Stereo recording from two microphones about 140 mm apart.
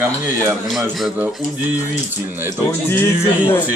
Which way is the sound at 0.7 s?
Centre (ahead or behind).